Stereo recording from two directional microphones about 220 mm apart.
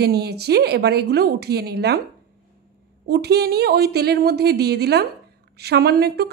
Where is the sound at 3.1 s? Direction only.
45° right (ahead or behind).